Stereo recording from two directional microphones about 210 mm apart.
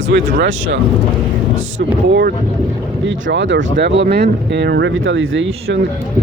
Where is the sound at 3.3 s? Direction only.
55° right (ahead or behind).